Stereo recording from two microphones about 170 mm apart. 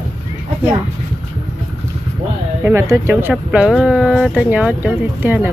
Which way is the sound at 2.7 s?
15° right (ahead or behind).